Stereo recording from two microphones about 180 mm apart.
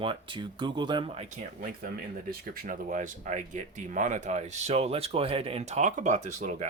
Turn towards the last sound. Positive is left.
turn(degrees=-40)  # may be behind; listen again after turning